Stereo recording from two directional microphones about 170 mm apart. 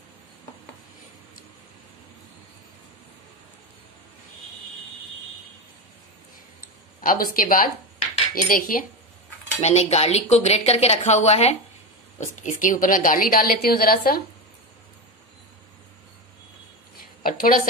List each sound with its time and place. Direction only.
7.0 s a woman's voice: 55° left (ahead or behind)
9.6 s a woman's voice: 40° left (ahead or behind); by 14.2 s 60° left (ahead or behind)
17.2 s a woman's voice: 55° left (ahead or behind)